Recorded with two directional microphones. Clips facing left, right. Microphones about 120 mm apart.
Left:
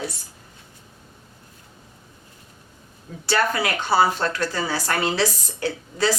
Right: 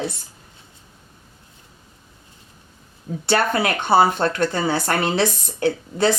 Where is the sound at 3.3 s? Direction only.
25° right (ahead or behind).